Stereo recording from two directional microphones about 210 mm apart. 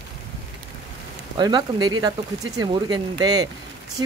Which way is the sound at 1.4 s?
20° right (ahead or behind).